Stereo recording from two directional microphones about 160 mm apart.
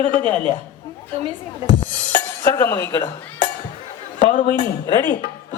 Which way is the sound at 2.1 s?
15° left (ahead or behind).